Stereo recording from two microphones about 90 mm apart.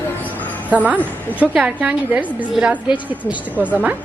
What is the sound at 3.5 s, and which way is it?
Speech, 20° left (ahead or behind).